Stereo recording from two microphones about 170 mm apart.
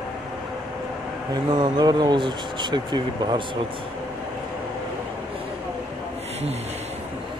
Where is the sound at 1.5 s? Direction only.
25° right (ahead or behind).